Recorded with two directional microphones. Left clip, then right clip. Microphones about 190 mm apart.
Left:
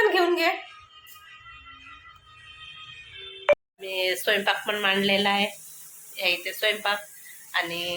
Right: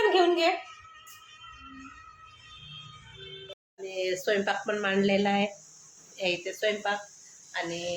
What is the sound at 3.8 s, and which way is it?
Speech, 10° right (ahead or behind).